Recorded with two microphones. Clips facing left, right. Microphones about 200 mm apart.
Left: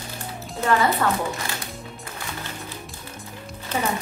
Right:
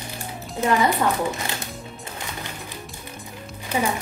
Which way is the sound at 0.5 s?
15° right (ahead or behind).